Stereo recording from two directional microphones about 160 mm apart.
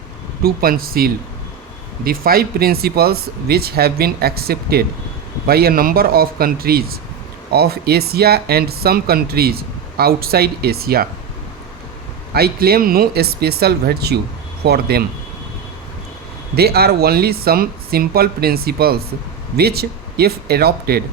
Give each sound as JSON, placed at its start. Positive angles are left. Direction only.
{"t": 0.4, "sound": "speech", "side_deg": -65}
{"t": 12.3, "sound": "speech", "side_deg": -75}
{"t": 16.6, "sound": "speech", "side_deg": -80}